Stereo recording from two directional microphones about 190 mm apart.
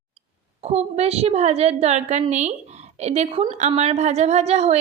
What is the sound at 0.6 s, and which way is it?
A woman's voice, 35° right (ahead or behind).